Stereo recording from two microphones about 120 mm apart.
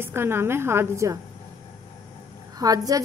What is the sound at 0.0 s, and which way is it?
A woman's voice, 20° right (ahead or behind).